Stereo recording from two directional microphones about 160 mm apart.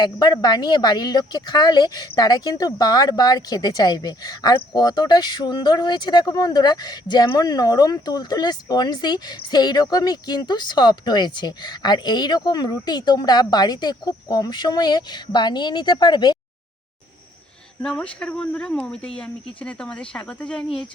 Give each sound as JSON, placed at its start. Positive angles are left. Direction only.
{"t": 0.0, "sound": "speech", "side_deg": 25}
{"t": 17.8, "sound": "speech", "side_deg": 5}